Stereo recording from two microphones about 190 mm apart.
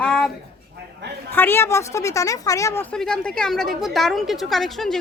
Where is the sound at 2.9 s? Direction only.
5° left (ahead or behind).